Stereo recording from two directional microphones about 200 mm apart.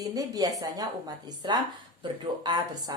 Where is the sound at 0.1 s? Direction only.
20° right (ahead or behind).